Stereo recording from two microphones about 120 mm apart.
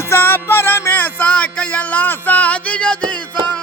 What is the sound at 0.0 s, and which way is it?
Music, 20° left (ahead or behind).